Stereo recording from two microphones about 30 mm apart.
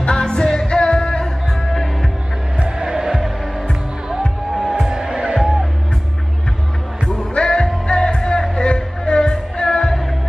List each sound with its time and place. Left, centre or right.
0.0 s music: left
2.8 s music: centre
4.8 s music: right
7.1 s music: left